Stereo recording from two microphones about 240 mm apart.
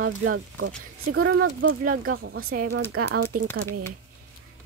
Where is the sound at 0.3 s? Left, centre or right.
Right.